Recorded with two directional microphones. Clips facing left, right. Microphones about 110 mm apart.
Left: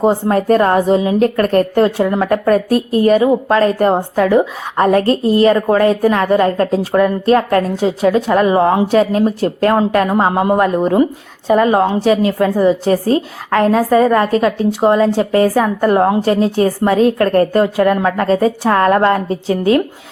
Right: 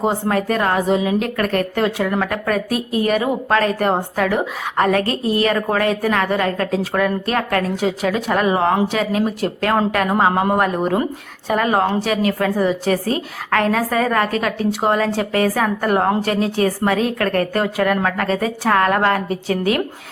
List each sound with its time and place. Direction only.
0.3 s a woman's voice: 35° left (ahead or behind)
2.5 s a woman's voice: 40° left (ahead or behind)
3.2 s a woman's voice: 25° left (ahead or behind)